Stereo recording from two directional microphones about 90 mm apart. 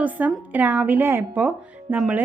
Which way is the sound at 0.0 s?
15° right (ahead or behind).